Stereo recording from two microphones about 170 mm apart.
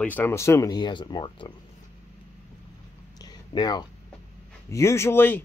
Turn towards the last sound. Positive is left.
turn(degrees=10)  # may be behind; listen again after turning